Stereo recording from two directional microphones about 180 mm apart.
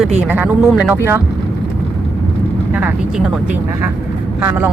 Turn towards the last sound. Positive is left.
turn(degrees=-10)  # may be behind; listen again after turning